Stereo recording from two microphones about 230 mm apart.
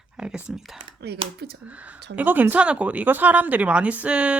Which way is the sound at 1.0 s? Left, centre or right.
Right.